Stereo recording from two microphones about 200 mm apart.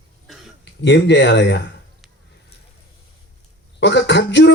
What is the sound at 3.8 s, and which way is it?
Speech, 60° left (ahead or behind).